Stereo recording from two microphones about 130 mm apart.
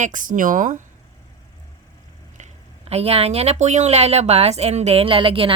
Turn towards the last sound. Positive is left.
turn(degrees=-40)  # may be behind; listen again after turning